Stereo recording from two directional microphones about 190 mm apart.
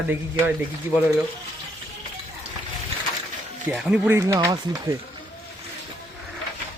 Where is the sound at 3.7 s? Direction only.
5° right (ahead or behind).